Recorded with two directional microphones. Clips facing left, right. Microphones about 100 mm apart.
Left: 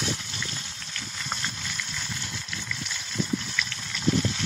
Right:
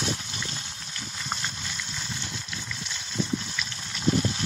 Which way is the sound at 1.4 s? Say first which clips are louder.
Left 1 dB; 15° right (ahead or behind).